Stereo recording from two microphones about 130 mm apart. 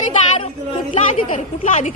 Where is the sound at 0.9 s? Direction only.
70° left (ahead or behind).